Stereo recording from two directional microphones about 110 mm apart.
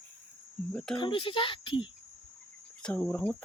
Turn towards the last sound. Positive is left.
turn(degrees=15)  # may be behind; listen again after turning